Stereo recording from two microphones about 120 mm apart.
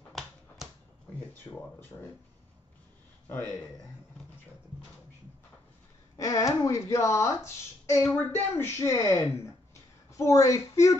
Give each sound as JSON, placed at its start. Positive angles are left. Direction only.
{"t": 1.3, "sound": "speech", "side_deg": 20}
{"t": 3.3, "sound": "speech", "side_deg": 15}
{"t": 6.1, "sound": "speech", "side_deg": 30}